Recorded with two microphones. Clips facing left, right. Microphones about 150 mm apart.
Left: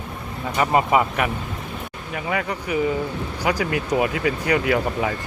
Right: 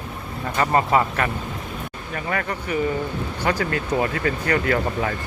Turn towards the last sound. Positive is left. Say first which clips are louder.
# left 1 dB
turn(degrees=10)  # may be behind; listen again after turning